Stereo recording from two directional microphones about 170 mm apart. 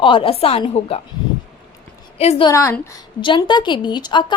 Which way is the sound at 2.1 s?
35° left (ahead or behind).